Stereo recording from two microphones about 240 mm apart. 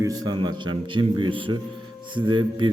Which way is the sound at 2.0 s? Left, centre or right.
Centre.